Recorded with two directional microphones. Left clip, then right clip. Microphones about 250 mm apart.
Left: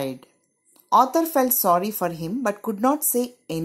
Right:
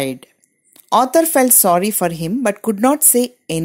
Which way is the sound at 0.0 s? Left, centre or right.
Right.